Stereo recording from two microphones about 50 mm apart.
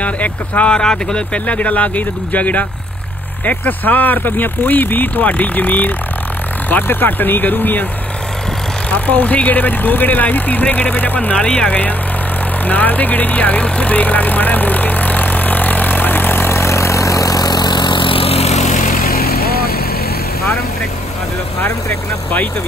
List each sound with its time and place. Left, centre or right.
0.0 s speech: left
0.7 s speech: centre; by 7.8 s left
8.9 s speech: left
11.3 s speech: left
16.5 s vehicle: left